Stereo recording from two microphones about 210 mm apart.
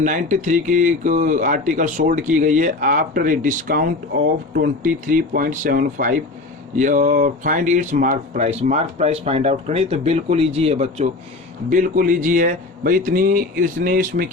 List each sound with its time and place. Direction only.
0.0 s speech: 35° right (ahead or behind)